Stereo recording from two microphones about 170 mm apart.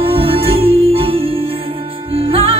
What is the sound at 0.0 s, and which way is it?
Music, 35° right (ahead or behind).